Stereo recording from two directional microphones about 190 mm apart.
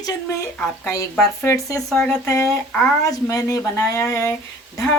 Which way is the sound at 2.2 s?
15° left (ahead or behind).